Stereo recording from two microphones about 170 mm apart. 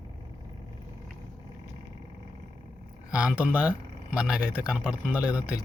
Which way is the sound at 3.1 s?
5° right (ahead or behind).